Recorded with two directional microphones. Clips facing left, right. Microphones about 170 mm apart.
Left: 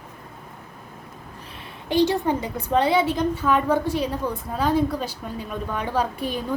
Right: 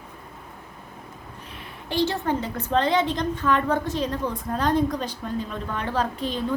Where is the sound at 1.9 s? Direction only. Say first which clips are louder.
Left 4 dB; 15° left (ahead or behind).